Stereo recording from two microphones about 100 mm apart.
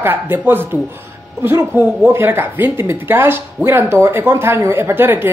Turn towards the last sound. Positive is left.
turn(degrees=-20)  # may be behind; listen again after turning